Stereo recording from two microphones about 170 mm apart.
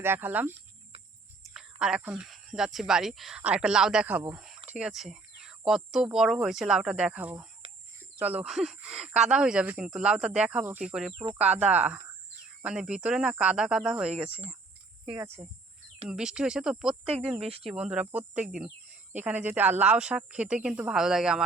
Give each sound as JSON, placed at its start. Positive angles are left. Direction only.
{"t": 0.0, "sound": "speech", "side_deg": -10}
{"t": 0.9, "sound": "cricket", "side_deg": -35}
{"t": 1.8, "sound": "speech", "side_deg": -5}